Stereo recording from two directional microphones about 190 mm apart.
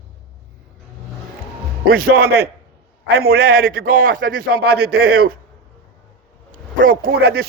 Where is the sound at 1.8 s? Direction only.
50° right (ahead or behind).